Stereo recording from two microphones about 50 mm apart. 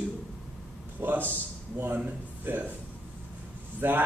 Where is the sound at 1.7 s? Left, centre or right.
Right.